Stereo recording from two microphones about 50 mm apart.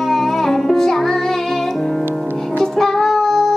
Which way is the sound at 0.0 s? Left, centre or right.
Centre.